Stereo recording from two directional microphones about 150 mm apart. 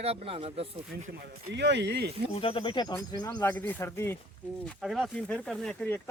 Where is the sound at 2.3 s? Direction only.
40° left (ahead or behind).